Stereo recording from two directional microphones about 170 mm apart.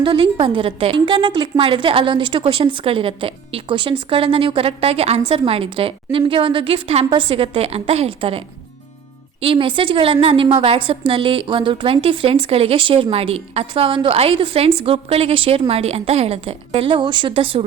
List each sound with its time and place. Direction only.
0.0 s a woman's voice: 30° right (ahead or behind)